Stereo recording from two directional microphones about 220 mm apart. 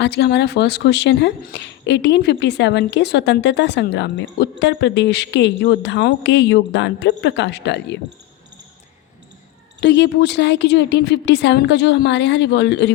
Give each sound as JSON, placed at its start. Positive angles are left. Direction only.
{"t": 0.0, "sound": "speech", "side_deg": 50}
{"t": 9.8, "sound": "speech", "side_deg": 50}